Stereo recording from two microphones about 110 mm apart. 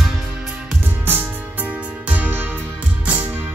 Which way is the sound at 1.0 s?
15° right (ahead or behind).